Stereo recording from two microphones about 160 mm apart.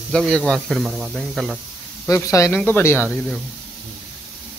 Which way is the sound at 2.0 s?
20° left (ahead or behind).